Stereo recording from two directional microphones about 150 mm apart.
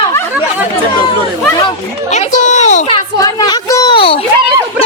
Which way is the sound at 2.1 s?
50° left (ahead or behind).